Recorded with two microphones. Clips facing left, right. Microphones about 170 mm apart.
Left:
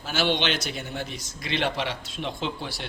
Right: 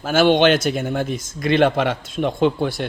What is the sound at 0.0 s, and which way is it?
A man's voice, 50° right (ahead or behind).